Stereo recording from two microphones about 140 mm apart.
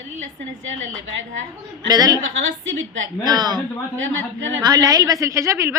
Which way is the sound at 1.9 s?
25° right (ahead or behind).